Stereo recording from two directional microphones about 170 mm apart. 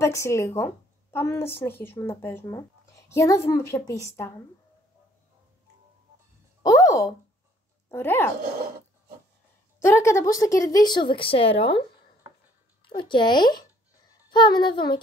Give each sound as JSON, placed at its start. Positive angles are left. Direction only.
{"t": 0.0, "sound": "a woman's voice", "side_deg": 15}
{"t": 6.6, "sound": "a sound", "side_deg": 20}
{"t": 7.9, "sound": "a woman's voice", "side_deg": 15}
{"t": 9.8, "sound": "speech", "side_deg": 15}
{"t": 12.9, "sound": "speech", "side_deg": 30}